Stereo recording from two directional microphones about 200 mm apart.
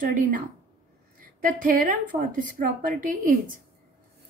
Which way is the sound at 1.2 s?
40° right (ahead or behind).